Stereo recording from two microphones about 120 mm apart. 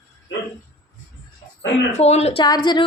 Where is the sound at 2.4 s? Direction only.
35° left (ahead or behind).